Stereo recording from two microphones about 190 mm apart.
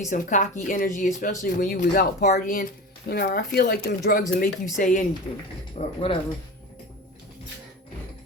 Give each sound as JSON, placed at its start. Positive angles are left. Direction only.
{"t": 0.1, "sound": "speech", "side_deg": 40}